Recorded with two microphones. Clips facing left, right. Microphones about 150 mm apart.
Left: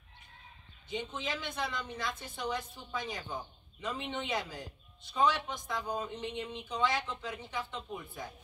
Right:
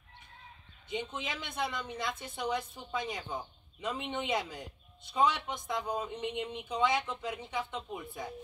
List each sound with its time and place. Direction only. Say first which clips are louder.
0.8 s speech: even; 15° right (ahead or behind)